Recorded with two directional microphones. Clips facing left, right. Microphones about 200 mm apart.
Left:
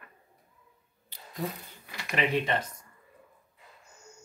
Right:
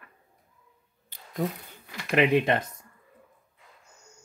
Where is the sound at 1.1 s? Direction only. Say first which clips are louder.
Left 1 dB; 50° right (ahead or behind).